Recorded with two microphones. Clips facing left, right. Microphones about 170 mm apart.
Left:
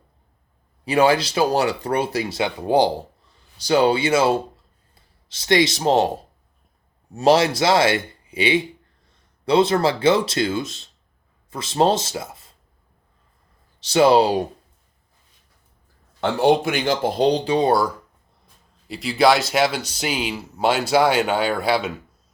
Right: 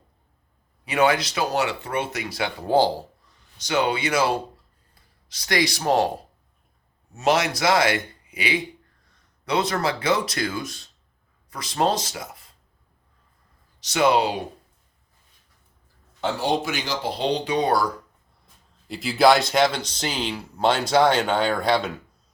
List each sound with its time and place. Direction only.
0.9 s speech: 30° left (ahead or behind)
3.6 s speech: 35° left (ahead or behind)
7.1 s speech: 30° left (ahead or behind)
13.7 s speech: 30° left (ahead or behind)
16.2 s speech: 60° left (ahead or behind)
17.3 s speech: 30° left (ahead or behind)
18.9 s speech: centre (ahead or behind)